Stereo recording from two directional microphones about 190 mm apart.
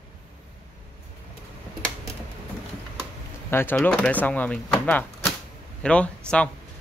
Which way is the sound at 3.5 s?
10° left (ahead or behind).